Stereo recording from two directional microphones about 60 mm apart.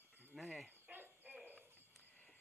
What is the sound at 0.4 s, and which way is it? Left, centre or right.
Cricket, centre.